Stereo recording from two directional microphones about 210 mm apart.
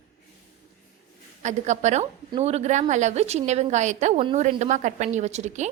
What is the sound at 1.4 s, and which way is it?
Speech, 35° right (ahead or behind).